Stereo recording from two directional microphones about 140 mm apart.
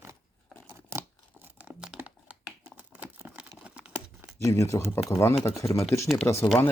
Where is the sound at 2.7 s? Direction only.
10° right (ahead or behind).